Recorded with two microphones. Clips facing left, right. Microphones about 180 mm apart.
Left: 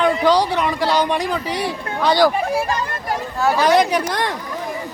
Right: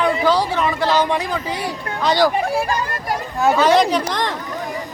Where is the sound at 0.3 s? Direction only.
15° left (ahead or behind).